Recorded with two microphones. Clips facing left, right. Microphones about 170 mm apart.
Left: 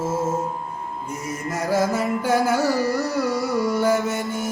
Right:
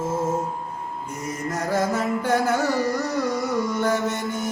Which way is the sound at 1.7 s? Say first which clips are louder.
Left 2 dB; 10° left (ahead or behind).